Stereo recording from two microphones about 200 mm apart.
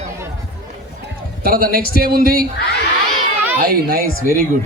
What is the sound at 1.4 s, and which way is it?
A man's voice, 45° right (ahead or behind).